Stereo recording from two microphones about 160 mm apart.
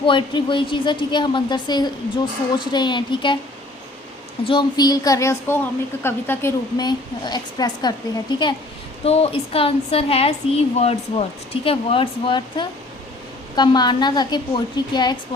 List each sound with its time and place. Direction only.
0.0 s a woman's voice: 30° left (ahead or behind)
4.4 s a woman's voice: 30° left (ahead or behind); by 6.5 s 15° left (ahead or behind)
6.7 s a woman's voice: 25° left (ahead or behind)
9.0 s a woman's voice: 40° left (ahead or behind)